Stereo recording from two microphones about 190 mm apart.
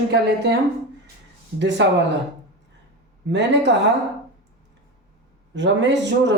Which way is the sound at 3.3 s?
65° right (ahead or behind).